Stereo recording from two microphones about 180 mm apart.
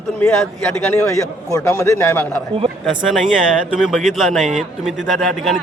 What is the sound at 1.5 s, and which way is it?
Speech, 15° left (ahead or behind).